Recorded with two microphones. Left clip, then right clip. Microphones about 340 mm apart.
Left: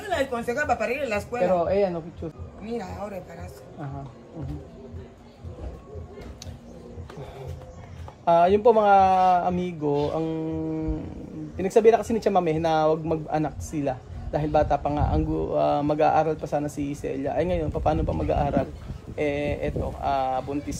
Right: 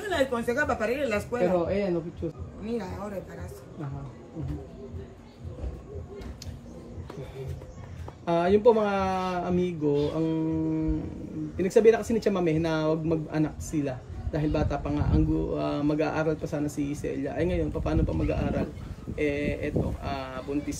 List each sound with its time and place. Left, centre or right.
0.0 s a woman's voice: centre
2.6 s a woman's voice: centre
8.3 s speech: centre